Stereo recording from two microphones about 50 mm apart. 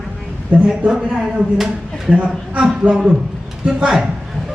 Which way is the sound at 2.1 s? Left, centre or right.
Right.